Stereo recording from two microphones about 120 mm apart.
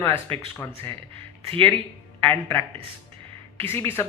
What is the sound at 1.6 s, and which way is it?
Speech, 15° left (ahead or behind).